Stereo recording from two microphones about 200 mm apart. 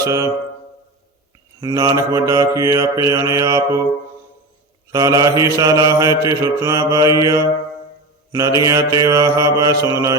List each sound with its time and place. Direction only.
0.0 s mantra: 15° right (ahead or behind)
1.6 s mantra: 15° right (ahead or behind)
4.9 s mantra: 15° right (ahead or behind)